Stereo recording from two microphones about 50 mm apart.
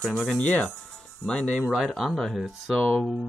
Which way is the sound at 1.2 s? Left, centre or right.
Centre.